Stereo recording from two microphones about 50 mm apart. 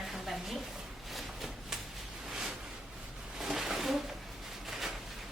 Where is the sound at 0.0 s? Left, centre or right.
Centre.